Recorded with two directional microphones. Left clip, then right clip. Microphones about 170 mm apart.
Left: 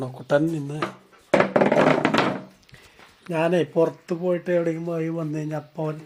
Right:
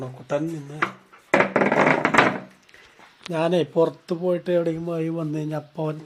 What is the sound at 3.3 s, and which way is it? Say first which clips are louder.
Speech: even; 5° left (ahead or behind).